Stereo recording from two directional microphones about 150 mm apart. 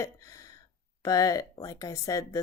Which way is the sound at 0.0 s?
20° left (ahead or behind).